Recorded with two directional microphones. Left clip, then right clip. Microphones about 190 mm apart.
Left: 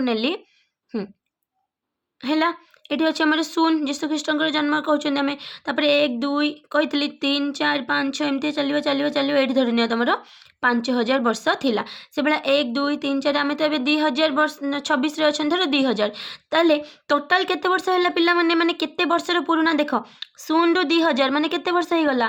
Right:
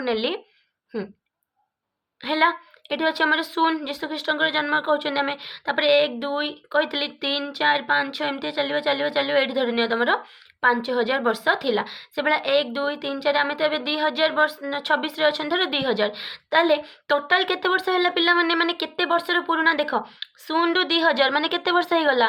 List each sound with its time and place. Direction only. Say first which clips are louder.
0.0 s speech: left 1 dB; 35° left (ahead or behind)
2.2 s speech: right 1 dB; 30° left (ahead or behind)